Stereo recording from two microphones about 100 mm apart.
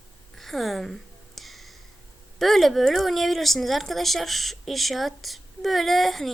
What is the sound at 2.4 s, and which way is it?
Speech, centre (ahead or behind).